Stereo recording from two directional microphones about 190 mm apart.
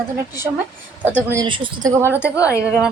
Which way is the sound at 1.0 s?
10° right (ahead or behind).